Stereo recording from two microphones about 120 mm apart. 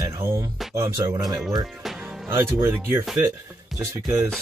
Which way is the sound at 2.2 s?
20° right (ahead or behind).